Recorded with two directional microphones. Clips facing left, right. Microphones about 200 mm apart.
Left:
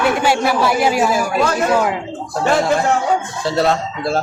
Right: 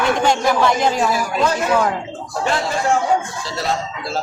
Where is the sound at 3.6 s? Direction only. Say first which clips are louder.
Left 6 dB; 60° left (ahead or behind).